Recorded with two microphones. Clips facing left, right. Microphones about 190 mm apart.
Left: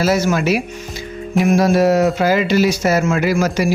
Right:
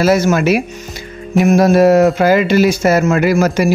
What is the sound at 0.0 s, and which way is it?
Speech, 55° right (ahead or behind).